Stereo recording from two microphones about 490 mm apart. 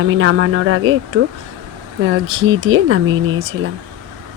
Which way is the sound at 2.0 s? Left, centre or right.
Right.